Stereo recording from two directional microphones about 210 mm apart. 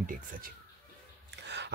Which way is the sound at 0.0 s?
40° right (ahead or behind).